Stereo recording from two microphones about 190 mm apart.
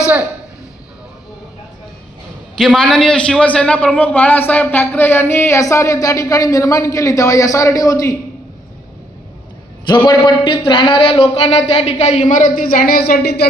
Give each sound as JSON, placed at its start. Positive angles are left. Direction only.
{"t": 2.5, "sound": "a man's voice", "side_deg": 5}
{"t": 9.8, "sound": "a man's voice", "side_deg": 25}